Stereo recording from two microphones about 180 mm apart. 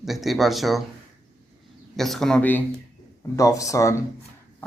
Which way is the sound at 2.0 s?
Centre (ahead or behind).